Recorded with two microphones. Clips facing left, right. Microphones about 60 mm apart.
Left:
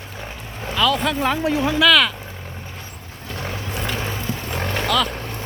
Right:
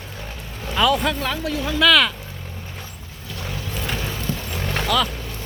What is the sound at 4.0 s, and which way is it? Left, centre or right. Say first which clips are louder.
Horse: left 1 dB; left.